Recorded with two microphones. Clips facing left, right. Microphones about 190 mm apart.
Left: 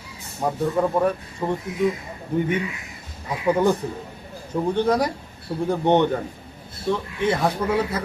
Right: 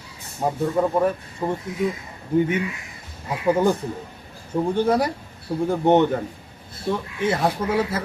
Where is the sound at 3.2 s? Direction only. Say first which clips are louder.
Even; 10° right (ahead or behind).